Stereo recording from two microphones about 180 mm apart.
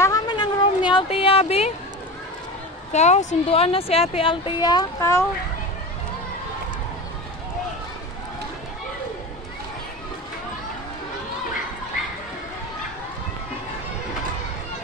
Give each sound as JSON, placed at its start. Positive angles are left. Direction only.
{"t": 0.0, "sound": "cat", "side_deg": 20}
{"t": 2.9, "sound": "a woman's voice", "side_deg": 40}